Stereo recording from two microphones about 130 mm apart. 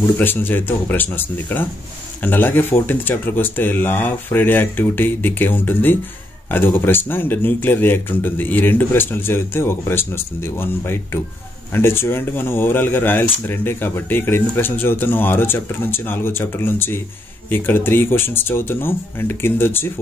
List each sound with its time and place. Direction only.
0.0 s speech: 15° left (ahead or behind)